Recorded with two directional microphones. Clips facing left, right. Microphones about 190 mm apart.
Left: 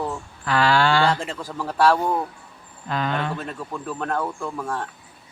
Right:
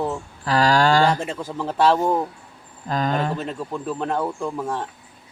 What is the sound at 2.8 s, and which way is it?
Speech, 40° right (ahead or behind).